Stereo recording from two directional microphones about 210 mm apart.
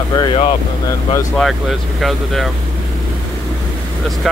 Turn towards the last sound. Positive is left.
turn(degrees=0)  # may be behind; listen again after turning